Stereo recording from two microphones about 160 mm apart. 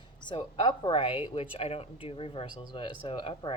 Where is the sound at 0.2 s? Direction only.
30° left (ahead or behind).